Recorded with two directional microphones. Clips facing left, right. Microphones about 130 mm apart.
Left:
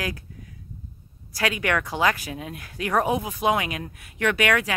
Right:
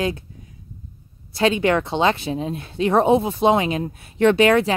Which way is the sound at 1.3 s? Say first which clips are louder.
Right 7 dB; 25° right (ahead or behind).